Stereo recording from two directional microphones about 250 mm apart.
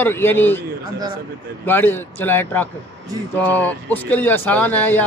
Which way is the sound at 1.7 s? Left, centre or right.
Centre.